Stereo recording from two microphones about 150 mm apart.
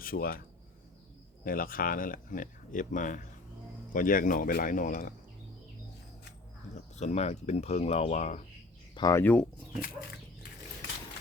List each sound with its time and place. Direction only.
0.0 s speech: 75° left (ahead or behind)
1.5 s speech: 70° left (ahead or behind)
6.9 s speech: 50° left (ahead or behind)
9.0 s speech: 25° left (ahead or behind)
9.2 s speech: 10° left (ahead or behind)